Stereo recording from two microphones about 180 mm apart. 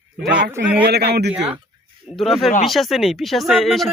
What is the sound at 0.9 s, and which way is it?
Speech, 65° right (ahead or behind).